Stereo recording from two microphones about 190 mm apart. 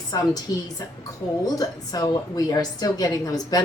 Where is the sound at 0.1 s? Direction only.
20° left (ahead or behind).